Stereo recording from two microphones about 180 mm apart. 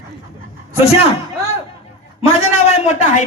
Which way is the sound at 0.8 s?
35° left (ahead or behind).